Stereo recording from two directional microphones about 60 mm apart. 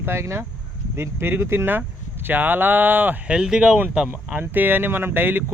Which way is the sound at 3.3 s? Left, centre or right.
Centre.